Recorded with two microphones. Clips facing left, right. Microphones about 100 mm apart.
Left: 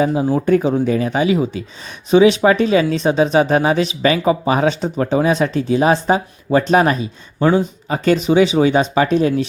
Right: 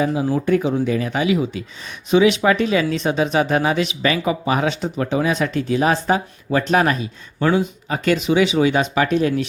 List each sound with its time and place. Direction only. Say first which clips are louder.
0.0 s speech: left 3 dB; 30° left (ahead or behind)